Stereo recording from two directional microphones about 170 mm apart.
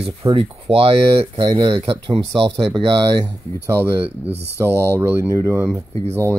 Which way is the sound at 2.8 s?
25° right (ahead or behind).